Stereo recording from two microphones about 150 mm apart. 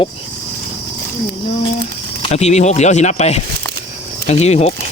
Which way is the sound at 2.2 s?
45° left (ahead or behind).